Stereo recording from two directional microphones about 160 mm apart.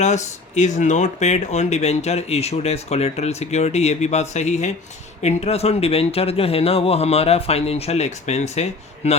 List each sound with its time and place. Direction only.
0.0 s speech: 45° left (ahead or behind)